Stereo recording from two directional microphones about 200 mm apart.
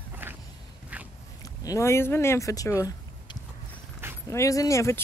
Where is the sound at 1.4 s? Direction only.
20° left (ahead or behind).